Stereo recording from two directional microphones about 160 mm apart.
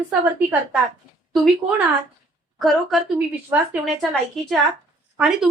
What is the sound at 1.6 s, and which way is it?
Speech, 20° right (ahead or behind).